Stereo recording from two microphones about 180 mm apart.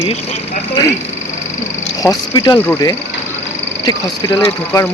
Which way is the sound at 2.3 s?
20° left (ahead or behind).